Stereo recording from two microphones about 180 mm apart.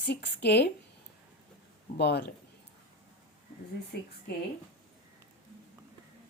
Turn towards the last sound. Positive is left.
turn(degrees=60)  # may be behind; listen again after turning